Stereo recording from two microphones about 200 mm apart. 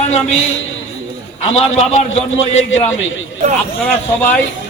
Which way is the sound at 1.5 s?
35° left (ahead or behind).